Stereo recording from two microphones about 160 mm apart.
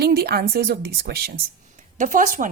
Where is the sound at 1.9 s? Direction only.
55° right (ahead or behind).